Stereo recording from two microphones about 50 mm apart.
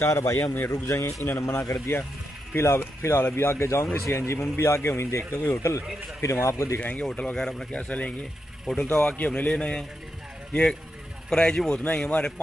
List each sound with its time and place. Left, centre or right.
0.1 s a man's voice: left
0.7 s speech: left
6.8 s speech: left
7.3 s a man's voice: centre
7.7 s speech: left
8.6 s a man's voice: centre